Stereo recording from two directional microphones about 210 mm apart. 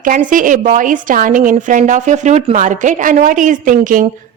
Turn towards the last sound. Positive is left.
turn(degrees=-40)  # may be behind; listen again after turning